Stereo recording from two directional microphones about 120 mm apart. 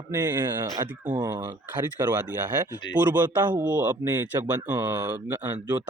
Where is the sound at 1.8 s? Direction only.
20° right (ahead or behind).